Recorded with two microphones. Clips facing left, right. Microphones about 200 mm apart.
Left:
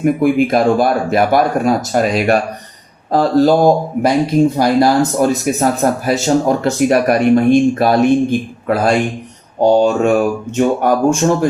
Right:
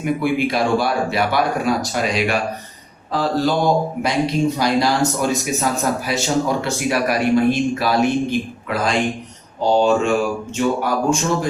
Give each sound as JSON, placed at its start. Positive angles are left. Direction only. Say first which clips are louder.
{"t": 0.0, "sound": "speech", "louder": "left 7 dB", "side_deg": 45}